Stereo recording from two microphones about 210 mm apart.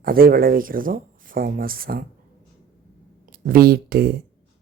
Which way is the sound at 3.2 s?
40° right (ahead or behind).